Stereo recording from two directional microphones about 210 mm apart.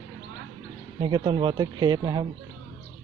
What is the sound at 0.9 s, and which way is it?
Speech, 20° right (ahead or behind).